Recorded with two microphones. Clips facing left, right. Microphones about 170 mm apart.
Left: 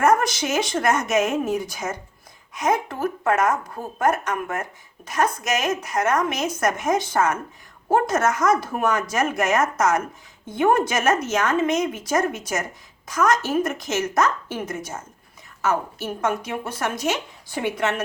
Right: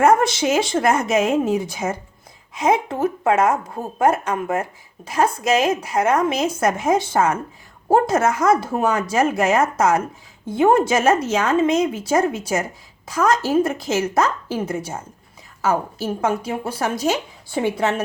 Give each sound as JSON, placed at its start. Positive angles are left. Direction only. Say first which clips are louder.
{"t": 0.0, "sound": "a woman's voice", "louder": "right 4 dB", "side_deg": -25}